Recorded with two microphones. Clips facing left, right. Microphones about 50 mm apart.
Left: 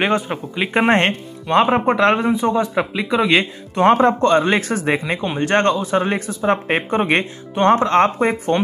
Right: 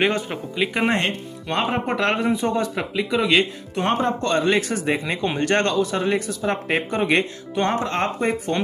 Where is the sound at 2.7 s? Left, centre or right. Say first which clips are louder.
Left 4 dB; left.